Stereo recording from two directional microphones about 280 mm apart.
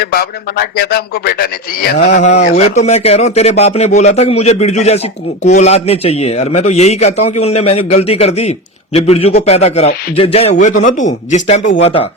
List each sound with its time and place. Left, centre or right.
0.0 s a man's voice: left